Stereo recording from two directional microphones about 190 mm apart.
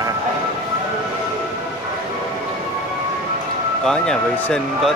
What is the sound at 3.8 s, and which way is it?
Speech, 5° left (ahead or behind).